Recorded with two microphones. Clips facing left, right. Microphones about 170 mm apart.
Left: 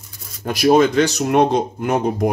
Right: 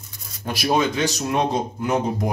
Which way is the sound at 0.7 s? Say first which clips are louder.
Left 7 dB; 60° left (ahead or behind).